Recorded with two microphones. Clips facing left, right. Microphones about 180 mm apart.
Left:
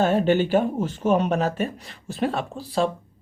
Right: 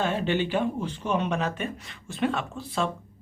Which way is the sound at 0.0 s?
45° left (ahead or behind).